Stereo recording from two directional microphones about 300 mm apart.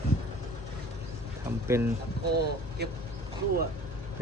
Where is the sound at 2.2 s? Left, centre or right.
Right.